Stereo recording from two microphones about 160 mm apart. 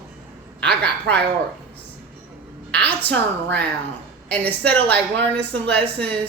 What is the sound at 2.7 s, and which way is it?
A woman's voice, 10° left (ahead or behind).